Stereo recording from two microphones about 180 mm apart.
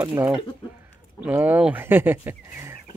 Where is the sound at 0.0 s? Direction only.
15° right (ahead or behind).